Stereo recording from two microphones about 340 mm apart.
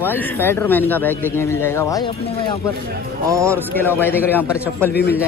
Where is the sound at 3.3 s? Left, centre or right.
Centre.